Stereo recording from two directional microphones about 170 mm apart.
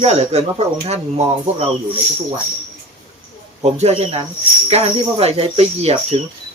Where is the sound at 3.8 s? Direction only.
40° right (ahead or behind).